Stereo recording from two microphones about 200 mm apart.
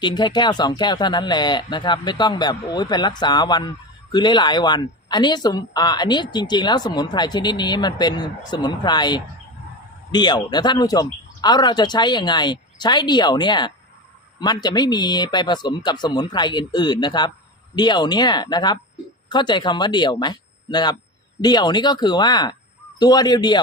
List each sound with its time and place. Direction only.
0.0 s speech: 20° left (ahead or behind)